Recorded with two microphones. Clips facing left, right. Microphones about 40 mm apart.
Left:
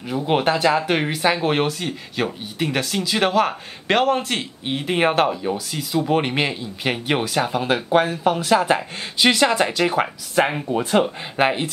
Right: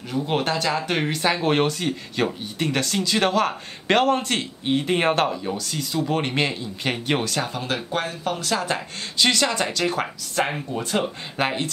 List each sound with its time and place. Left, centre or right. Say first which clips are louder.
0.1 s speech: left 4 dB; centre